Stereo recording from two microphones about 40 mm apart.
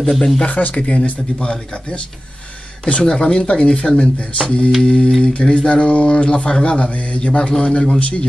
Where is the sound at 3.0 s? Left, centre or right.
Left.